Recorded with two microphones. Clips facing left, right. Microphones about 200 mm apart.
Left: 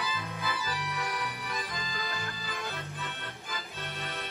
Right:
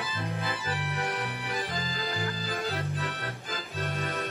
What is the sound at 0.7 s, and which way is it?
Music, 55° right (ahead or behind).